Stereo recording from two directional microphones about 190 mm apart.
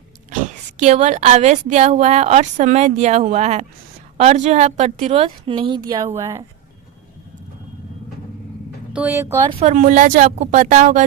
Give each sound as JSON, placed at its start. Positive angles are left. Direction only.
{"t": 0.8, "sound": "a woman's voice", "side_deg": -35}
{"t": 6.1, "sound": "speech", "side_deg": -15}
{"t": 8.9, "sound": "speech", "side_deg": -10}
{"t": 9.4, "sound": "a woman's voice", "side_deg": -30}